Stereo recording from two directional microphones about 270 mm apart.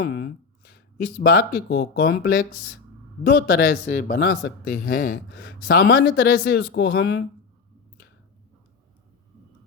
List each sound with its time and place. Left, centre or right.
0.1 s a man's voice: left